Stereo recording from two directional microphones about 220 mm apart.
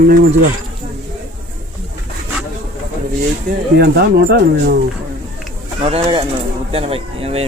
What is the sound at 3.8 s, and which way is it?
Speech, 45° right (ahead or behind).